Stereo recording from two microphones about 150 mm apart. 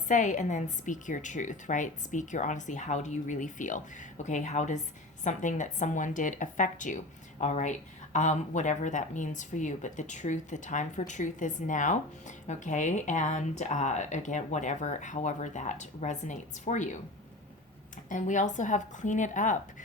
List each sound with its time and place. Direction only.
0.1 s speech: 55° left (ahead or behind)
18.1 s speech: 55° left (ahead or behind)